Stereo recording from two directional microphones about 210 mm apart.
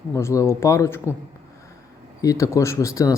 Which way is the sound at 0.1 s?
15° left (ahead or behind).